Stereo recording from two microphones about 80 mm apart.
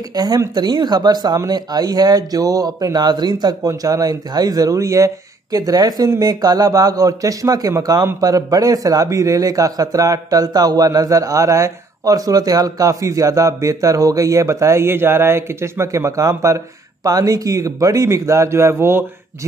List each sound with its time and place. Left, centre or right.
0.1 s a man's voice: right